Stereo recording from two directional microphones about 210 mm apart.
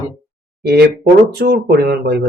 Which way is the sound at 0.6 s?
50° right (ahead or behind).